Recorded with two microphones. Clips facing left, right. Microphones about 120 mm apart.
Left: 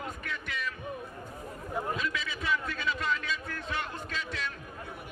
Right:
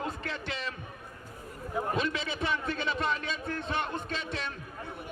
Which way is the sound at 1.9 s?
30° right (ahead or behind).